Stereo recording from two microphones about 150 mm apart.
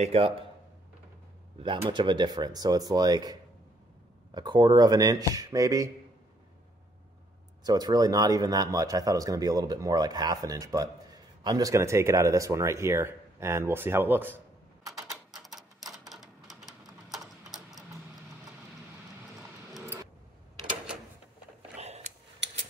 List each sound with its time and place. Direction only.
0.0 s speech: 40° right (ahead or behind)
1.6 s speech: 30° right (ahead or behind)
7.6 s speech: 25° right (ahead or behind)
15.3 s a sound: centre (ahead or behind)
16.1 s typewriter: centre (ahead or behind)
21.7 s a sound: 45° right (ahead or behind)